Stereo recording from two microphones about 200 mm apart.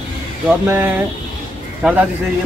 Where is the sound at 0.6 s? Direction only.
10° right (ahead or behind).